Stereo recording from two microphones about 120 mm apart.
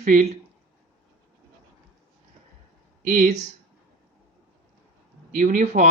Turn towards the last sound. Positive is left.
turn(degrees=-90)